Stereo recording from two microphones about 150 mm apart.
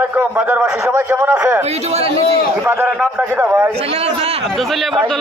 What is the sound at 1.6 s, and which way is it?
Speech, 45° right (ahead or behind).